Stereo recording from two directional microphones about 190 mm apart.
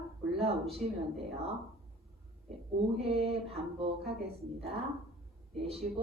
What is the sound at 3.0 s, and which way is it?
Mantra, 30° right (ahead or behind).